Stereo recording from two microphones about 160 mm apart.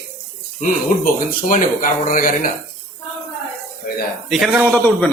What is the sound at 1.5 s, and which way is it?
Speech, 60° left (ahead or behind).